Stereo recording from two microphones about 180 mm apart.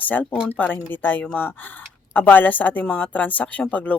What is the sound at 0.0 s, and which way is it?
Speech, 10° left (ahead or behind).